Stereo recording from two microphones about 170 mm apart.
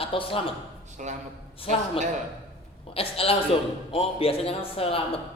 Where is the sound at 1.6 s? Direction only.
35° left (ahead or behind).